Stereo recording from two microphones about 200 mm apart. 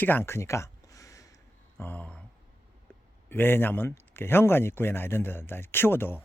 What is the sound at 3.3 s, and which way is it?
A man's voice, 10° left (ahead or behind).